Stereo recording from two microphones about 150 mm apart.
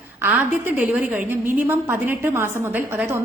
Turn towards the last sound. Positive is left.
turn(degrees=-15)  # may be behind; listen again after turning